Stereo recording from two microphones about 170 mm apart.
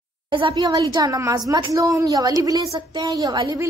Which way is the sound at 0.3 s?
30° right (ahead or behind).